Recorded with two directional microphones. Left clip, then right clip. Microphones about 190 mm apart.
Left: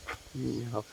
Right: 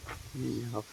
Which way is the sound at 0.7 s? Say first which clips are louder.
Left 2 dB; 10° left (ahead or behind).